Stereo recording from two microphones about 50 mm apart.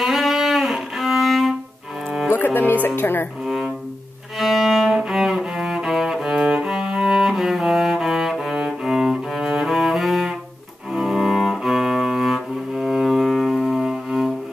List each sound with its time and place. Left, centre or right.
0.0 s music: centre
2.3 s speech: left
4.4 s cello: centre
13.3 s music: centre